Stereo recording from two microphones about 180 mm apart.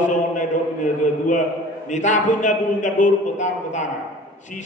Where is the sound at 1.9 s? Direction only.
45° left (ahead or behind).